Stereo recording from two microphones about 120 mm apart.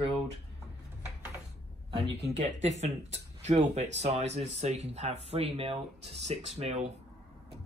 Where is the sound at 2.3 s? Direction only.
70° right (ahead or behind).